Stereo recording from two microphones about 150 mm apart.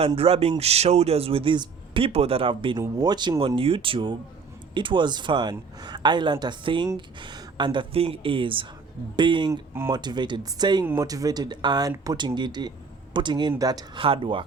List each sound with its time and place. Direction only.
0.2 s a man's voice: 40° right (ahead or behind)
2.7 s a man's voice: 25° right (ahead or behind)
9.5 s speech: 15° right (ahead or behind)
9.9 s a man's voice: 30° right (ahead or behind)